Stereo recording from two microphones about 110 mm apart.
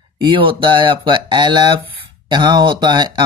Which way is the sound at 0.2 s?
50° right (ahead or behind).